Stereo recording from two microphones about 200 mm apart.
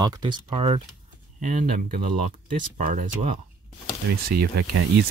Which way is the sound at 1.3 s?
40° right (ahead or behind).